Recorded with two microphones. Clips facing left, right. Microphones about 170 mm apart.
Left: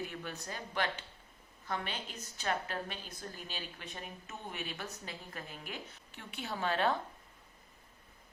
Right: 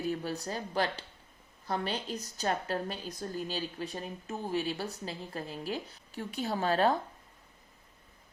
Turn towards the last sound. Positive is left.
turn(degrees=-40)  # may be behind; listen again after turning